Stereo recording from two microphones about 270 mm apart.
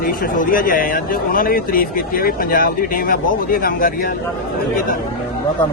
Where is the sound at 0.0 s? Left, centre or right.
Left.